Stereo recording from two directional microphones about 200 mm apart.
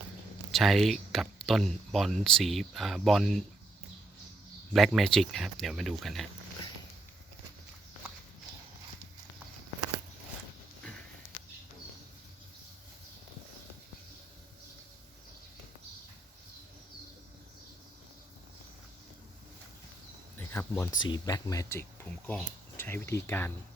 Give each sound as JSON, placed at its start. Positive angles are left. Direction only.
{"t": 0.5, "sound": "speech", "side_deg": 0}
{"t": 4.7, "sound": "speech", "side_deg": 0}
{"t": 20.5, "sound": "a sound", "side_deg": 10}
{"t": 21.0, "sound": "speech", "side_deg": 20}